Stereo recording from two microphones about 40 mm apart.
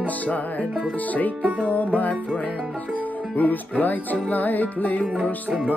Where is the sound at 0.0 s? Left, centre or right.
Left.